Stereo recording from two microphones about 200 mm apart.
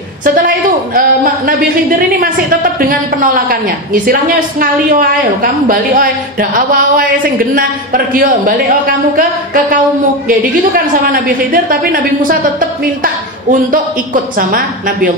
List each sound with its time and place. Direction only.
0.9 s speech: 45° right (ahead or behind)
11.1 s speech: 45° right (ahead or behind)